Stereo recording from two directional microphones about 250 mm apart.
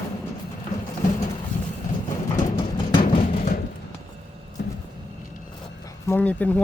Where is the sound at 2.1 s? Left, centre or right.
Centre.